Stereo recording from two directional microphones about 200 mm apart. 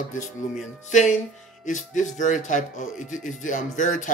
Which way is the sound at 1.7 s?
40° left (ahead or behind).